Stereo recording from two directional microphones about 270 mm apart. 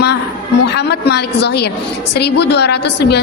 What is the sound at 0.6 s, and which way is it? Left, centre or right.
A woman's voice, left.